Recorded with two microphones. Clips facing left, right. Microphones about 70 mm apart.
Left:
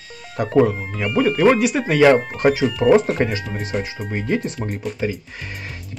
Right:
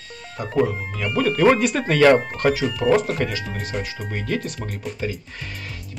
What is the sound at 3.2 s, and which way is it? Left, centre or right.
Speech, left.